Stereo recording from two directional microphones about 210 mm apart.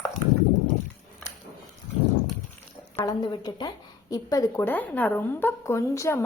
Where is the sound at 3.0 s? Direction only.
20° left (ahead or behind).